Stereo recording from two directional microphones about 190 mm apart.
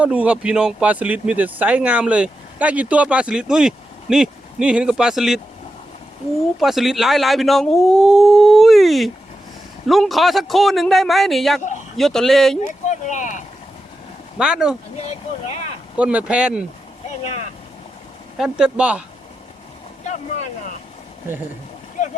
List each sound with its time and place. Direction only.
0.0 s speech: 5° right (ahead or behind)
6.6 s speech: centre (ahead or behind)
12.9 s speech: 40° left (ahead or behind)
14.3 s speech: 5° right (ahead or behind)
16.0 s speech: 5° right (ahead or behind)
17.2 s speech: 35° left (ahead or behind)
18.3 s speech: 5° right (ahead or behind)
20.1 s vehicle: 40° left (ahead or behind)